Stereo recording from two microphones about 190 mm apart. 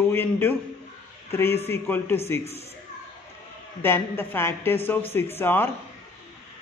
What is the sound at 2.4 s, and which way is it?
Speech, 35° left (ahead or behind).